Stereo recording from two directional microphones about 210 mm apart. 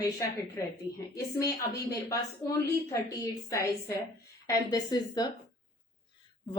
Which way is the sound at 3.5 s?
15° left (ahead or behind).